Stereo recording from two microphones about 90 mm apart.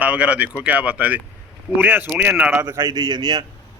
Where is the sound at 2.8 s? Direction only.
50° right (ahead or behind).